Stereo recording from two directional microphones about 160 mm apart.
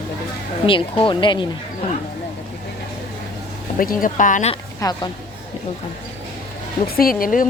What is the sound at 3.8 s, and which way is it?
Speech, 60° left (ahead or behind).